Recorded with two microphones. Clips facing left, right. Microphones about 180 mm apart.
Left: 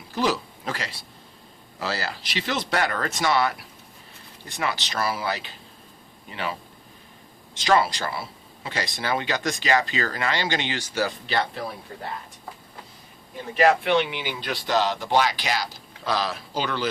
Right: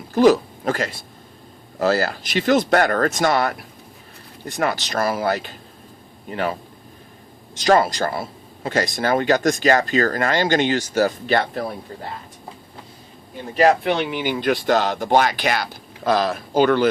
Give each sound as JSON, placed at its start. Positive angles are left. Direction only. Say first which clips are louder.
{"t": 0.1, "sound": "speech", "louder": "right 11 dB", "side_deg": -50}
{"t": 13.5, "sound": "speech", "louder": "right 3 dB", "side_deg": -40}